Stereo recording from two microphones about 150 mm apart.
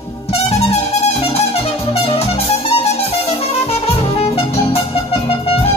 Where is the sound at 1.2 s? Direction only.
40° left (ahead or behind).